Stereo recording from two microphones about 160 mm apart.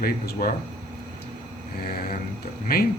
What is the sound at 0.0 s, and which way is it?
Speech, 70° left (ahead or behind).